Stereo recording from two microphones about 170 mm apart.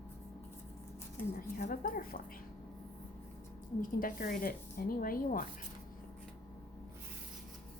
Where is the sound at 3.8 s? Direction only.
55° left (ahead or behind).